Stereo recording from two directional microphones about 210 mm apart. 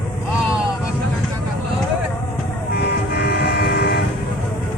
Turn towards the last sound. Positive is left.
turn(degrees=50)  # may be behind; listen again after turning